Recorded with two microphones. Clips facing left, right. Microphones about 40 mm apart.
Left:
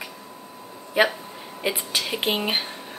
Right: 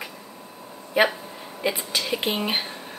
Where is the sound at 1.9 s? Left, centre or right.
Left.